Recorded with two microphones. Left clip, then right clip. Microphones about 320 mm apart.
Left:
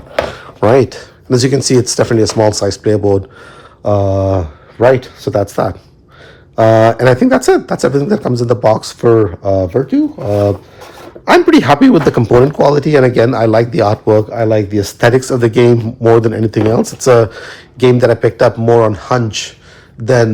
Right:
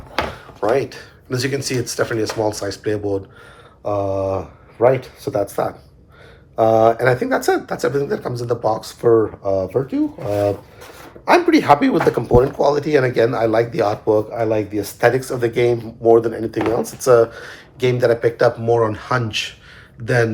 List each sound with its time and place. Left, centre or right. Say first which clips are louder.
0.8 s speech: left 10 dB; centre
6.7 s speech: left 5 dB; left
11.3 s speech: left 5 dB; left
14.0 s speech: left 6 dB; left
14.3 s speech: left 7 dB; left